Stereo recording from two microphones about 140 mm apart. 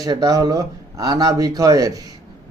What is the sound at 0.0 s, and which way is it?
A man's voice, 25° right (ahead or behind).